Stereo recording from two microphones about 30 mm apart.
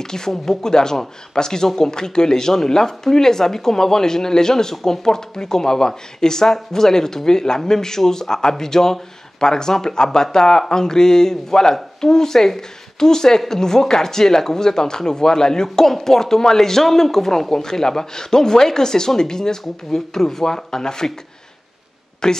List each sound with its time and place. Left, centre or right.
0.0 s speech: left
20.4 s speech: left
22.2 s speech: left